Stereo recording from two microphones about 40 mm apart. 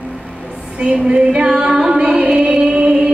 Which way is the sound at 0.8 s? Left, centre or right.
Right.